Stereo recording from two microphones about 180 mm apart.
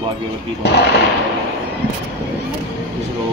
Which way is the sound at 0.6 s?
70° left (ahead or behind).